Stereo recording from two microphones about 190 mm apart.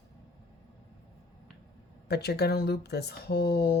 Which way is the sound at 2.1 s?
55° left (ahead or behind).